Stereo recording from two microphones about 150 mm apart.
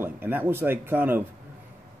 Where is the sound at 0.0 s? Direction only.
10° right (ahead or behind).